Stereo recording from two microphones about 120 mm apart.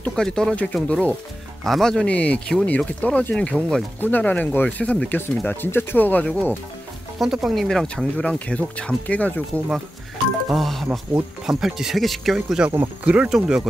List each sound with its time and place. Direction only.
0.0 s speech: 5° left (ahead or behind)
7.2 s speech: 5° right (ahead or behind)
10.5 s speech: centre (ahead or behind)